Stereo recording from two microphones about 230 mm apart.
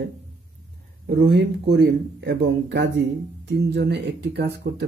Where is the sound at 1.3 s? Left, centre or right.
Right.